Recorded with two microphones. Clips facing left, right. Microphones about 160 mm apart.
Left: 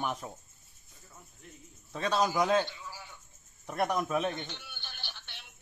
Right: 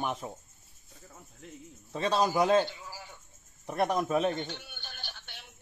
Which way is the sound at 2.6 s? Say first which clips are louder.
Right 3 dB; 40° right (ahead or behind).